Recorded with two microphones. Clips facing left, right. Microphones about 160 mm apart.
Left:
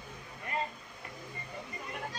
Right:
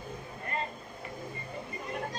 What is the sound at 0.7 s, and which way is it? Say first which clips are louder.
Vehicle: right 6 dB; 50° right (ahead or behind).